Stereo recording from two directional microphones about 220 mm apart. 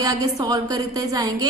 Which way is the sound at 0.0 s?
15° right (ahead or behind).